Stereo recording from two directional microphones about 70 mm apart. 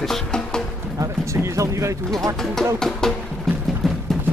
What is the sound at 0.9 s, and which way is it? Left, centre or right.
Speech, right.